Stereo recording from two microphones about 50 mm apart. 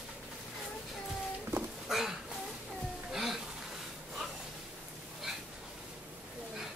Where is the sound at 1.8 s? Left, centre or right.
Centre.